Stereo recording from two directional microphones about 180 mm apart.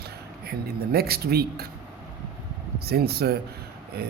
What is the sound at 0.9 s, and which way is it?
Speech, 60° right (ahead or behind).